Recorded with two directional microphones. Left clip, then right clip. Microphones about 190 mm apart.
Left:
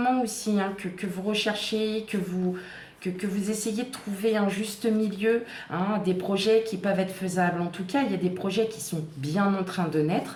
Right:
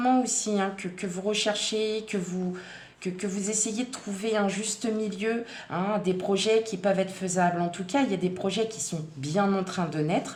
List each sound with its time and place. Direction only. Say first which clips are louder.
0.0 s a woman's voice: right 1 dB; 35° right (ahead or behind)
3.0 s a woman's voice: even; 35° right (ahead or behind)